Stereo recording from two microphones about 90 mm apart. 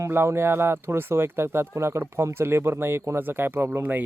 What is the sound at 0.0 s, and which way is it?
Speech, 30° right (ahead or behind).